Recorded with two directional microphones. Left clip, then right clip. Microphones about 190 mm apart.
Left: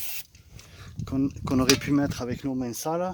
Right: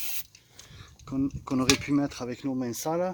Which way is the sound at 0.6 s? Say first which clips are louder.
Left 4 dB; 40° left (ahead or behind).